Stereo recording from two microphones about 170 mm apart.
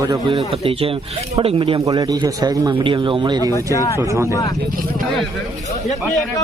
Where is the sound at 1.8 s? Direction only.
20° right (ahead or behind).